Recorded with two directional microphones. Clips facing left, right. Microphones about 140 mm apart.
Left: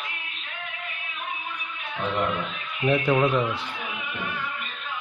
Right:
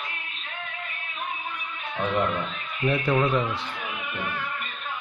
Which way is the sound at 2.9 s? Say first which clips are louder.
Left 2 dB; 10° left (ahead or behind).